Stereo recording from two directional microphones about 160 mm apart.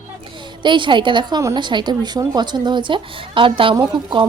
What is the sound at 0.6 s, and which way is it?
A woman's voice, 30° right (ahead or behind).